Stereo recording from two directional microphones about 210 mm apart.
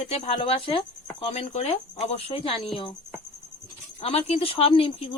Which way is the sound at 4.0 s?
30° left (ahead or behind).